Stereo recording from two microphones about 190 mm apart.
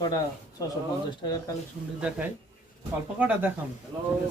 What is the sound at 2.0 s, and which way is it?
Speech, 5° right (ahead or behind).